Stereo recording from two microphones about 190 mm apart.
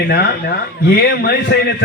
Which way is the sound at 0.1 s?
60° left (ahead or behind).